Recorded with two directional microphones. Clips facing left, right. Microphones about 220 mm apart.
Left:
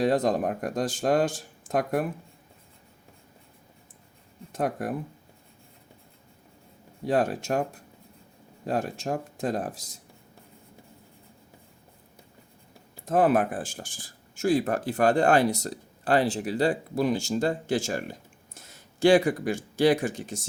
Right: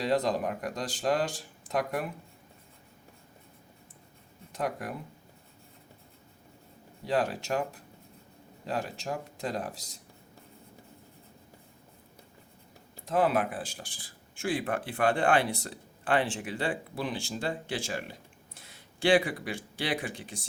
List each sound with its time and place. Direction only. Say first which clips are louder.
0.0 s speech: left 4 dB; 50° left (ahead or behind)
4.5 s speech: left 5 dB; 50° left (ahead or behind)
7.0 s speech: left 4 dB; 50° left (ahead or behind)
8.6 s speech: left 5 dB; 50° left (ahead or behind)
13.1 s speech: left 5 dB; 50° left (ahead or behind)